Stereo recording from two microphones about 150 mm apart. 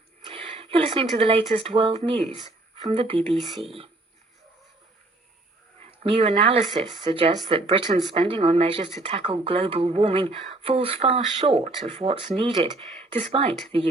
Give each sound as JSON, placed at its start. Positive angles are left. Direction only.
{"t": 0.3, "sound": "speech", "side_deg": -40}
{"t": 5.8, "sound": "speech", "side_deg": -40}